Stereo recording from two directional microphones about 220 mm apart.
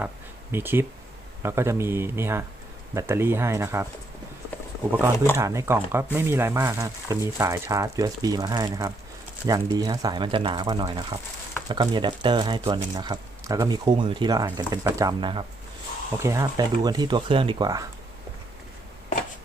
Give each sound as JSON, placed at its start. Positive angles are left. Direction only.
{"t": 0.5, "sound": "speech", "side_deg": -10}
{"t": 4.9, "sound": "speech", "side_deg": -10}
{"t": 5.1, "sound": "speech", "side_deg": 10}
{"t": 5.4, "sound": "speech", "side_deg": -10}